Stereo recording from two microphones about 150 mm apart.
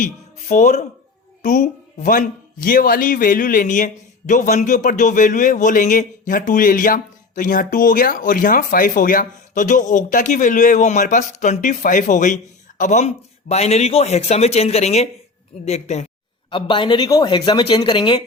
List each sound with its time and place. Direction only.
0.0 s speech: 55° left (ahead or behind)
16.5 s speech: 35° left (ahead or behind)